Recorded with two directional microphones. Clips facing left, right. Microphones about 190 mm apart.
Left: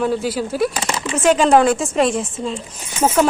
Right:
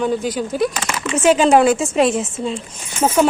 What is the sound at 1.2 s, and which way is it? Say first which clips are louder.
Speech: right 1 dB; 5° right (ahead or behind).